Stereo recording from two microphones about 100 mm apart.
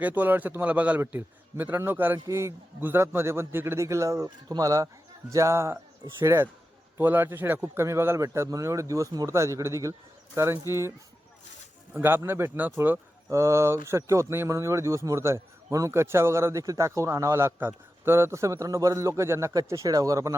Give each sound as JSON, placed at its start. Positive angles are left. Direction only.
{"t": 0.0, "sound": "a man's voice", "side_deg": -15}
{"t": 11.9, "sound": "a man's voice", "side_deg": -20}